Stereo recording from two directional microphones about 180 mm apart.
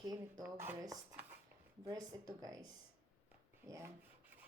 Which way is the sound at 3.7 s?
15° right (ahead or behind).